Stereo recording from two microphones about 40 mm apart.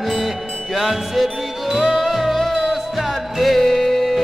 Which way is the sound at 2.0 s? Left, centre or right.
Centre.